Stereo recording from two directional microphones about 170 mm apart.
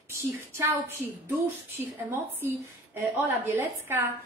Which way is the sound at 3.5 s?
15° right (ahead or behind).